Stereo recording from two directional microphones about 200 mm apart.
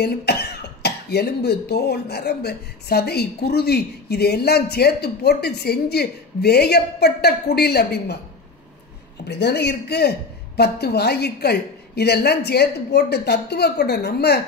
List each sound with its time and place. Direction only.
0.0 s speech: 55° left (ahead or behind)
9.3 s speech: 55° left (ahead or behind)